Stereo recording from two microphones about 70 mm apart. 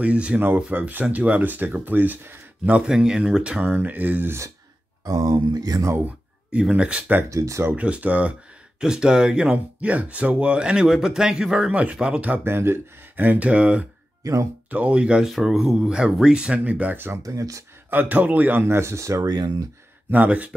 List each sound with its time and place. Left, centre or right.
0.0 s speech: centre
2.6 s speech: centre
5.0 s speech: right
6.7 s speech: centre
7.2 s speech: right
7.7 s speech: centre
12.4 s speech: right; by 13.8 s centre
14.2 s speech: right
14.7 s speech: centre
15.2 s speech: centre; by 17.1 s right
17.2 s speech: right
17.8 s speech: right
19.2 s speech: right
20.1 s speech: right